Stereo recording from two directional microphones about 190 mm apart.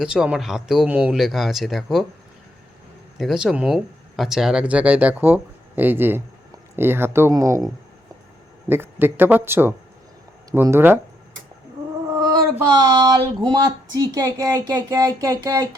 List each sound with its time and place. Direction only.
0.0 s speech: 5° right (ahead or behind)
3.2 s speech: centre (ahead or behind)
8.6 s speech: 10° right (ahead or behind)
12.5 s speech: 20° right (ahead or behind)